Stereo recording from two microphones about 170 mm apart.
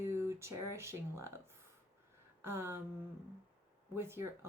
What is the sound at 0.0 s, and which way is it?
Speech, 15° right (ahead or behind).